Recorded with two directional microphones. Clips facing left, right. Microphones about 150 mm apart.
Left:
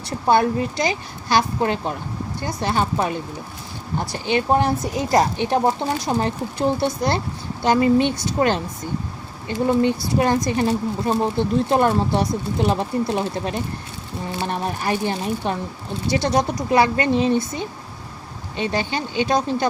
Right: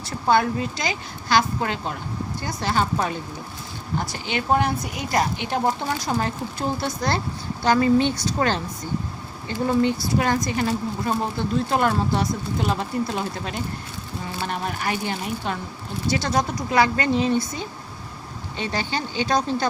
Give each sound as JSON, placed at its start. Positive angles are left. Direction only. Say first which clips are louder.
{"t": 0.8, "sound": "a woman's voice", "louder": "left 5 dB", "side_deg": 30}
{"t": 8.1, "sound": "a woman's voice", "louder": "left 1 dB", "side_deg": 55}
{"t": 8.4, "sound": "a woman's voice", "louder": "left 4 dB", "side_deg": 20}
{"t": 9.6, "sound": "a woman's voice", "louder": "left 2 dB", "side_deg": 20}